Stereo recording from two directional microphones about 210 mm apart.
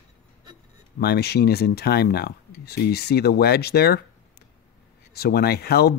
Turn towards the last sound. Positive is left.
turn(degrees=50)  # may be behind; listen again after turning